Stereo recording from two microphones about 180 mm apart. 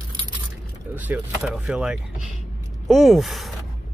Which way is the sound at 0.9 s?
10° right (ahead or behind).